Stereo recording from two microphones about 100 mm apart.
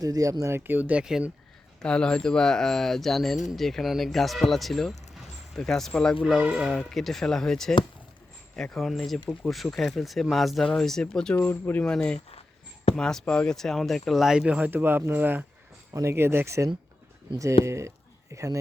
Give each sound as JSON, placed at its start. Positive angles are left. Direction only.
{"t": 0.0, "sound": "speech", "side_deg": -35}
{"t": 0.7, "sound": "speech", "side_deg": -15}
{"t": 1.8, "sound": "speech", "side_deg": 10}
{"t": 6.4, "sound": "speech", "side_deg": -10}
{"t": 6.7, "sound": "speech", "side_deg": 0}
{"t": 11.3, "sound": "speech", "side_deg": 20}
{"t": 11.9, "sound": "speech", "side_deg": 10}
{"t": 15.9, "sound": "speech", "side_deg": -30}
{"t": 17.7, "sound": "speech", "side_deg": -30}